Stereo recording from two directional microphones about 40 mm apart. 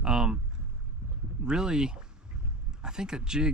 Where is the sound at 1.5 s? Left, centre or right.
Centre.